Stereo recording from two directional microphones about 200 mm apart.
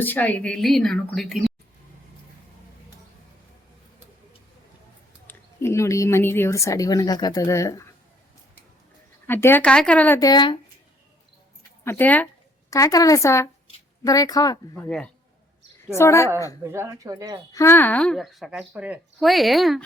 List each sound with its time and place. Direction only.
0.0 s speech: 10° left (ahead or behind)
5.3 s a woman's voice: 15° left (ahead or behind)
9.2 s a woman's voice: 10° left (ahead or behind)
11.9 s a woman's voice: 10° left (ahead or behind)
16.6 s speech: 15° right (ahead or behind)
17.5 s speech: 15° left (ahead or behind)